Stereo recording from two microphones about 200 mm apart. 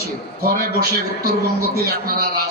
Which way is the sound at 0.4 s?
50° right (ahead or behind).